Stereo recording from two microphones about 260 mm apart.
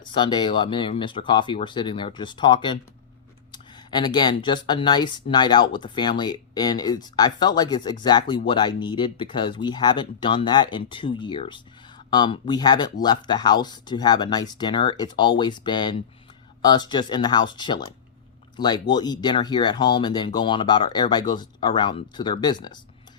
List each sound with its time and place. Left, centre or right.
0.0 s speech: centre